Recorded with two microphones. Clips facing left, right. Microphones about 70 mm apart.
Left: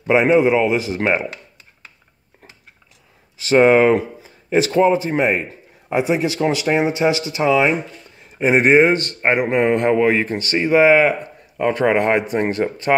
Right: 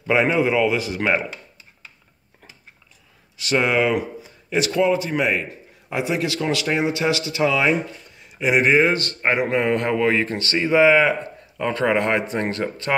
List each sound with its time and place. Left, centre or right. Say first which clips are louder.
0.0 s speech: left 5 dB; left
3.3 s speech: left 7 dB; left
8.2 s a man's voice: left 3 dB; left